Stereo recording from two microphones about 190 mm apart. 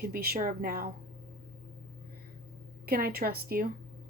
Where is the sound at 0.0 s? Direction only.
50° right (ahead or behind).